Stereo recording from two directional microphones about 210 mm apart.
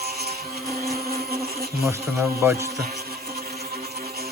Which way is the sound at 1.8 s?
10° right (ahead or behind).